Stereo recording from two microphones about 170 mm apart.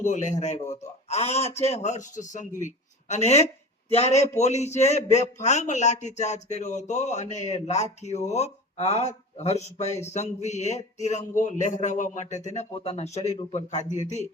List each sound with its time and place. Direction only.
0.0 s a man's voice: 45° left (ahead or behind)